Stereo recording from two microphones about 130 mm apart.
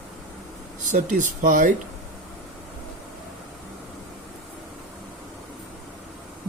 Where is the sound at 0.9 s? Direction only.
80° right.